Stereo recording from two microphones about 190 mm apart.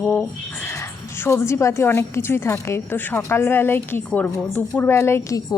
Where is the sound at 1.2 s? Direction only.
15° left (ahead or behind).